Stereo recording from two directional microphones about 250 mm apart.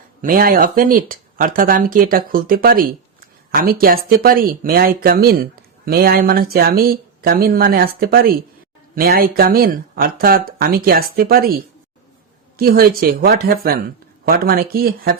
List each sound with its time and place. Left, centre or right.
0.2 s speech: right
12.5 s speech: right